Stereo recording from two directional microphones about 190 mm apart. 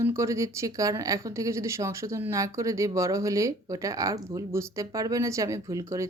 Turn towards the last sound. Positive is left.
turn(degrees=-15)  # may be behind; listen again after turning